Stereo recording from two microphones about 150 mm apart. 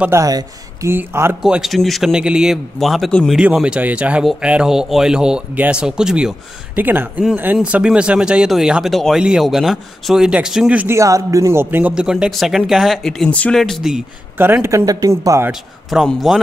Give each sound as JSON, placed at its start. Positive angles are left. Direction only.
{"t": 0.0, "sound": "speech", "side_deg": -20}
{"t": 1.4, "sound": "a man's voice", "side_deg": 0}
{"t": 14.4, "sound": "speech", "side_deg": -15}
{"t": 15.9, "sound": "a man's voice", "side_deg": 0}